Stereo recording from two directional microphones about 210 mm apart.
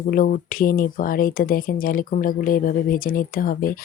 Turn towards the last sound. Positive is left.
turn(degrees=40)  # may be behind; listen again after turning